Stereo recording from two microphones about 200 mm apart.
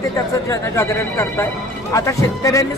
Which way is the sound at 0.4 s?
15° left (ahead or behind).